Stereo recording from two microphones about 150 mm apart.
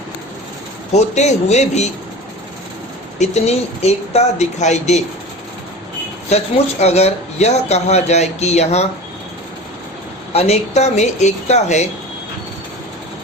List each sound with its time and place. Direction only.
0.9 s speech: 50° left (ahead or behind)
3.2 s speech: 45° left (ahead or behind)
6.2 s speech: 45° left (ahead or behind)
10.3 s speech: 45° left (ahead or behind)